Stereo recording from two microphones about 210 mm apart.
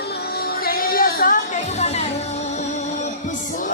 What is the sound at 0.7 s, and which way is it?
Music, 45° left (ahead or behind).